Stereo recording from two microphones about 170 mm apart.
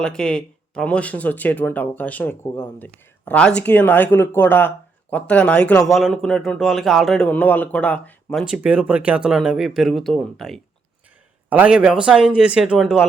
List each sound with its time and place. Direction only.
0.0 s speech: 5° left (ahead or behind)
11.4 s speech: 10° right (ahead or behind)